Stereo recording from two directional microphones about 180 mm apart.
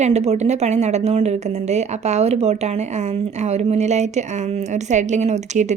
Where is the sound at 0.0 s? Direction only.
40° right (ahead or behind).